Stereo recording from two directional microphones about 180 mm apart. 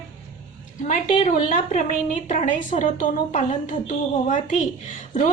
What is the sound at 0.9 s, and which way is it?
A woman's voice, 45° left (ahead or behind).